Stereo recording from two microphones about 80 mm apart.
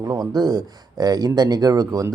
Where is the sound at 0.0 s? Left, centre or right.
Right.